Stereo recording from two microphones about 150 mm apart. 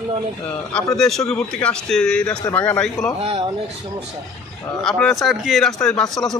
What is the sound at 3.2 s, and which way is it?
Speech, 35° right (ahead or behind).